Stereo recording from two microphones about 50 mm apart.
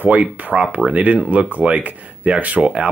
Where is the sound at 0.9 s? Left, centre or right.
Right.